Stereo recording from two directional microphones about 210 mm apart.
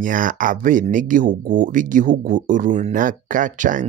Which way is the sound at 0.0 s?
40° right (ahead or behind).